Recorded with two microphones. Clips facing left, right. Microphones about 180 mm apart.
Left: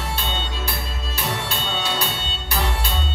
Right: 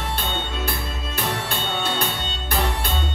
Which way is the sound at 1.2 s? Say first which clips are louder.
Right 1 dB; 55° right (ahead or behind).